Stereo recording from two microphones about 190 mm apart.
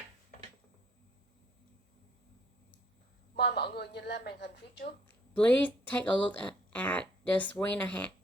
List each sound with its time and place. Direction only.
3.3 s a woman's voice: 60° left (ahead or behind)
5.0 s speech: 5° left (ahead or behind)